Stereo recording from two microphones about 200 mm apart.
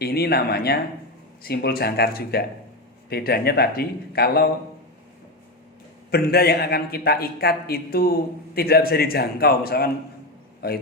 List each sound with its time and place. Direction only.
0.0 s a man's voice: 50° left (ahead or behind)
6.1 s a man's voice: 50° left (ahead or behind)